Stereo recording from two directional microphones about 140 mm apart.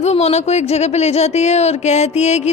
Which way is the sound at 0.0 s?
50° left (ahead or behind).